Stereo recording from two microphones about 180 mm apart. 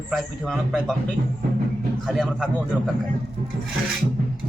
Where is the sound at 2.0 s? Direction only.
Centre (ahead or behind).